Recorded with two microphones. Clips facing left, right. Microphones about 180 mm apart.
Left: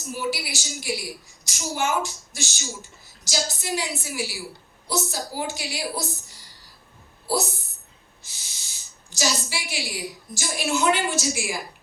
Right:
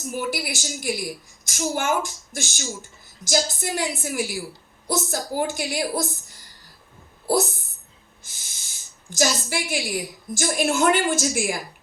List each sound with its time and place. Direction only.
0.1 s speech: 50° right (ahead or behind)
7.3 s speech: 50° right (ahead or behind)